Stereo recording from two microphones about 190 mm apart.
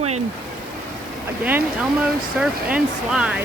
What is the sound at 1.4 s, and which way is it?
A woman's voice, 10° right (ahead or behind).